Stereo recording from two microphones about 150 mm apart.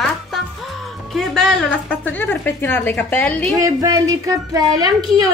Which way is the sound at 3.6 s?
25° right (ahead or behind).